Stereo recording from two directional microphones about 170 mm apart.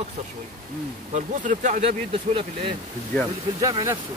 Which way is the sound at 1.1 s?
45° right (ahead or behind).